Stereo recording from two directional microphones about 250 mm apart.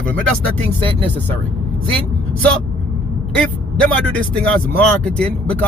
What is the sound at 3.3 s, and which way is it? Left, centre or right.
Speech, centre.